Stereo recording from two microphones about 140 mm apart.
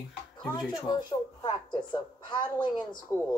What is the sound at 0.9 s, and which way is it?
A woman's voice, 30° left (ahead or behind).